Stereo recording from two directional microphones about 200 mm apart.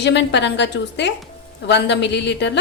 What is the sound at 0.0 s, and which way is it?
A woman's voice, 60° left (ahead or behind).